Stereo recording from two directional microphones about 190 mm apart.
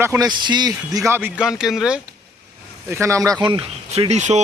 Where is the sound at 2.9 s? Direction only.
15° right (ahead or behind); by 4.4 s 35° right (ahead or behind).